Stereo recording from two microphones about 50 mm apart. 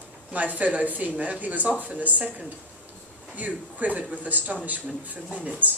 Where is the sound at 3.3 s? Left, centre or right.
Right.